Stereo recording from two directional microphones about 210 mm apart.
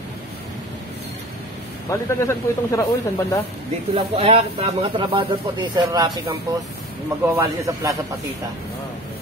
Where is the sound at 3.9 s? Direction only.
25° right (ahead or behind).